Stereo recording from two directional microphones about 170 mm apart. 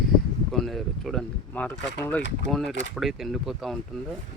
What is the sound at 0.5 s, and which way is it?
Speech, centre (ahead or behind).